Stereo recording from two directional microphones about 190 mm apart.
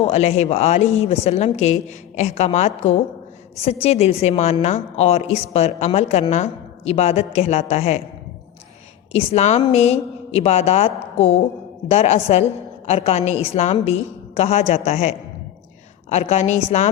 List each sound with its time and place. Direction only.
0.0 s a woman's voice: 35° left (ahead or behind)
9.1 s a woman's voice: 35° left (ahead or behind)